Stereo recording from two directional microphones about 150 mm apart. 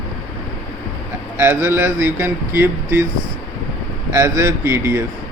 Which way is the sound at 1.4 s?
15° right (ahead or behind).